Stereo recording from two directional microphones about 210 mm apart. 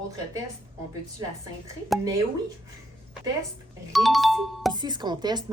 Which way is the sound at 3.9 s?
Centre (ahead or behind).